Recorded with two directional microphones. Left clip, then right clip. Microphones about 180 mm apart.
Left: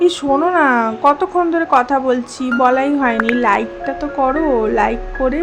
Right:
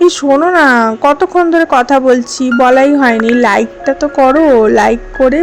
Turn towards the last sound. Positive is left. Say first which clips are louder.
# right 8 dB
turn(degrees=-30)  # may be behind; listen again after turning